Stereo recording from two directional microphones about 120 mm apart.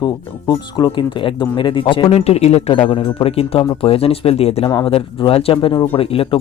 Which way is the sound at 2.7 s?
45° left (ahead or behind).